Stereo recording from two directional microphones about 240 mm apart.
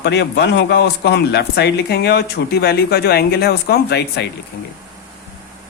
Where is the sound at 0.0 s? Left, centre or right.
Left.